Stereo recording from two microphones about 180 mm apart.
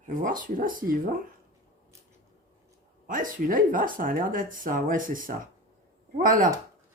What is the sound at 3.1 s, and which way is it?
Speech, 50° right (ahead or behind).